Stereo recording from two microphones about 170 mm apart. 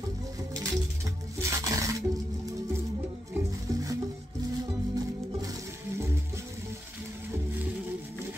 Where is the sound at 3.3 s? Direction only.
20° right (ahead or behind).